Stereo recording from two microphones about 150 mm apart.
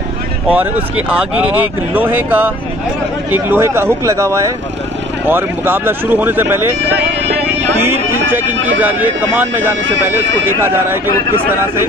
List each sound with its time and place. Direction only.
0.5 s speech: 10° right (ahead or behind)
7.8 s speech: 15° right (ahead or behind)